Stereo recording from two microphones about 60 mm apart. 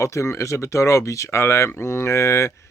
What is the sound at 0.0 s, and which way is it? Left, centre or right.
Speech, left.